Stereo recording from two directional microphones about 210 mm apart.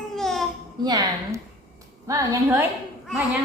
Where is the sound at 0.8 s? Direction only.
20° right (ahead or behind).